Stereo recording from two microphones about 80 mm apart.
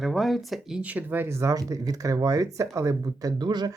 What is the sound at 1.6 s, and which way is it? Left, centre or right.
Speech, right.